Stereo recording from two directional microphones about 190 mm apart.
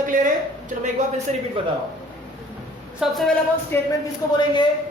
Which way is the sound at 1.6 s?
30° right (ahead or behind).